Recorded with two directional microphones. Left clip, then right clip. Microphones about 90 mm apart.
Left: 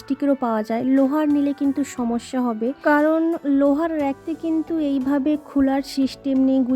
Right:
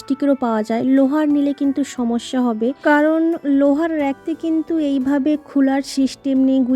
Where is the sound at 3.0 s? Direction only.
30° right (ahead or behind).